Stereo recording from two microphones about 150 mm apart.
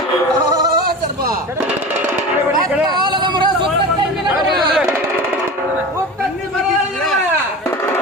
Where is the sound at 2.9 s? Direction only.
30° right (ahead or behind).